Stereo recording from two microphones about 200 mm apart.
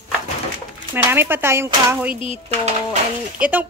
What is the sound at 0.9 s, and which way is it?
Speech, 10° right (ahead or behind).